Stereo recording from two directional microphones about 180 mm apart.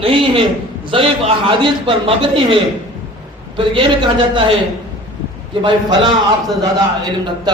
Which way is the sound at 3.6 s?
30° right (ahead or behind).